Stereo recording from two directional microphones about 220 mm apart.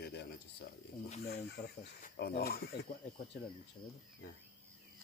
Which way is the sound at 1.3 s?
45° left (ahead or behind).